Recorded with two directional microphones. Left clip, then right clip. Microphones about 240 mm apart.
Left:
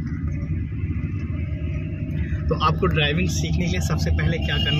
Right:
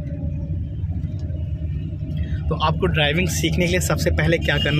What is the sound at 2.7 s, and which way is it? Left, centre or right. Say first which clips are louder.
Speech: right 2 dB; centre.